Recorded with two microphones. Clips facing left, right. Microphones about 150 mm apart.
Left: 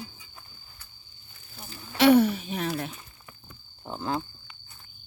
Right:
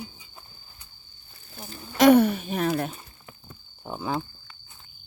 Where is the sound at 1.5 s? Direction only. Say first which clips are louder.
Right 4 dB; 45° right (ahead or behind).